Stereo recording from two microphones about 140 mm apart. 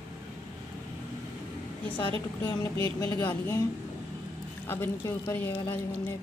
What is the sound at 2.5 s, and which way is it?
Speech, 30° left (ahead or behind).